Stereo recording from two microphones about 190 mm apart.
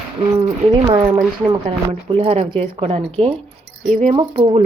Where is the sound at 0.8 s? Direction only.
25° right (ahead or behind).